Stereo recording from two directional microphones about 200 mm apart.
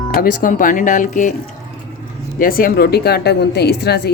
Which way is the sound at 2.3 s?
45° left (ahead or behind).